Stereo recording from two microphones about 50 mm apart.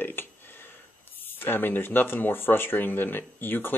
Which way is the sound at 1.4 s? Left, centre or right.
Left.